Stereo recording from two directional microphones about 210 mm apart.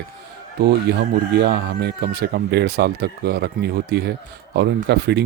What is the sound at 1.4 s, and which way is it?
Speech, 50° right (ahead or behind).